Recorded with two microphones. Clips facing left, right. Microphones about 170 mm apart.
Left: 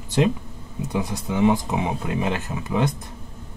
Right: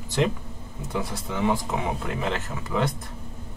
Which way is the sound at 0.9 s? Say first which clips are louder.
Left 4 dB; 15° left (ahead or behind).